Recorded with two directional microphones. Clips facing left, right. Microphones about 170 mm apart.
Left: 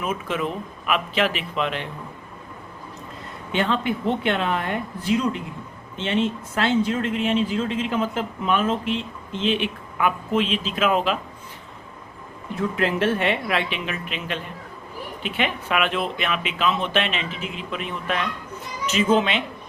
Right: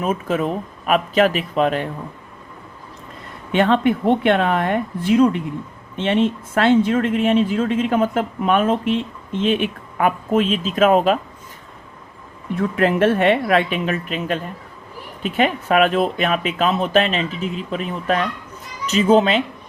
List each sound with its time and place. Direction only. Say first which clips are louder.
0.0 s speech: right 5 dB; 40° right (ahead or behind)
3.5 s speech: right 7 dB; 50° right (ahead or behind)
12.8 s speech: right 7 dB; 50° right (ahead or behind)